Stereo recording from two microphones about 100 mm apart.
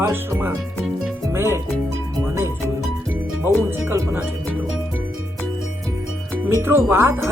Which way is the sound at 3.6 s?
20° right (ahead or behind).